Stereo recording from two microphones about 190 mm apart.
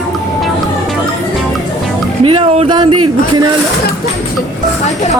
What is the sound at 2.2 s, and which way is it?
Speech, 30° right (ahead or behind).